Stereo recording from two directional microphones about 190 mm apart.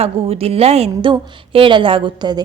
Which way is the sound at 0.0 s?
30° right (ahead or behind).